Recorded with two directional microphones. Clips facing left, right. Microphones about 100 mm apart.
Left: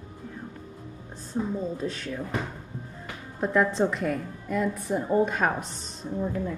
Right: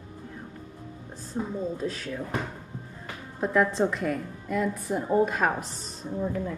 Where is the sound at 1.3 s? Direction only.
Centre (ahead or behind).